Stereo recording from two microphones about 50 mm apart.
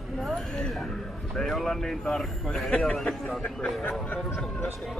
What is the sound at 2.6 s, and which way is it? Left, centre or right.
Speech, left.